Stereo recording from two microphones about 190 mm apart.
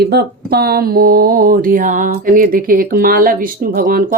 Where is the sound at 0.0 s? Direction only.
55° right (ahead or behind).